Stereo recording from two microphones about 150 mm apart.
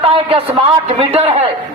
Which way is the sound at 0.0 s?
40° right (ahead or behind).